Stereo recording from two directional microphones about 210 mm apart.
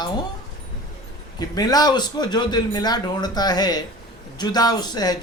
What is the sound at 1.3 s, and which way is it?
Speech, 20° left (ahead or behind).